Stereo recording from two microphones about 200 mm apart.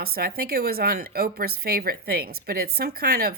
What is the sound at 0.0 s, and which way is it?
Speech, 50° right (ahead or behind).